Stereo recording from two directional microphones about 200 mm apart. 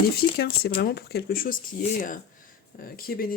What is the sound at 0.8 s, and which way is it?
Speech, 55° left (ahead or behind).